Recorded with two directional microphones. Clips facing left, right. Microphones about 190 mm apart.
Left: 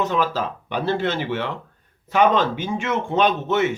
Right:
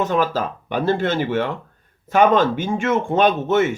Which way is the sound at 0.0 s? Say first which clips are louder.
Right 2 dB; 50° right (ahead or behind).